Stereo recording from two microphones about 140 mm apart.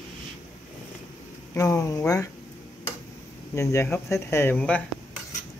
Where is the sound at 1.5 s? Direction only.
20° left (ahead or behind).